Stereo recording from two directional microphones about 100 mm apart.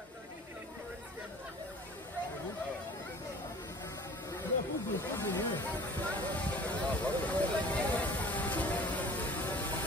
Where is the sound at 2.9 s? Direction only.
40° left (ahead or behind).